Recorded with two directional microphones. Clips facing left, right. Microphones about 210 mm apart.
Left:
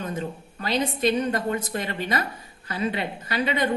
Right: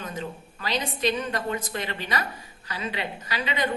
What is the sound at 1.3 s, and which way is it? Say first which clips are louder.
A woman's voice: left 3 dB; 45° left (ahead or behind).